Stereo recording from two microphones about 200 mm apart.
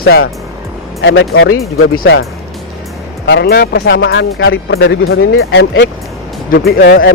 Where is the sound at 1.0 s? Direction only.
70° left (ahead or behind).